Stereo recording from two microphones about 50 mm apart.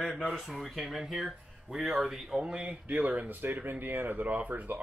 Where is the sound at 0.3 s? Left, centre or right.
Centre.